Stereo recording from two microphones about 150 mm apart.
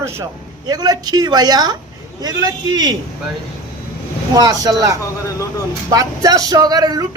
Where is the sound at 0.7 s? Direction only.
25° right (ahead or behind).